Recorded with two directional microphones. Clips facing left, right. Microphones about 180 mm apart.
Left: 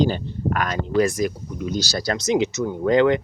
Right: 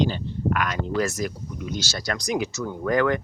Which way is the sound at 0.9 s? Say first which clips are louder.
Left 7 dB; 15° left (ahead or behind).